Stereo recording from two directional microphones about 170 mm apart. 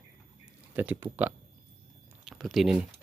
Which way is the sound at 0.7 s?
15° right (ahead or behind).